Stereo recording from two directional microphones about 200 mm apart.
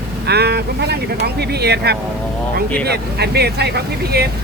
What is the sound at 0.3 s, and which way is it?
Speech, 55° right (ahead or behind).